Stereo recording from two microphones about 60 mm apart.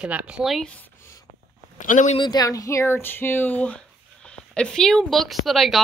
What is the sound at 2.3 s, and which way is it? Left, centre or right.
Speech, left.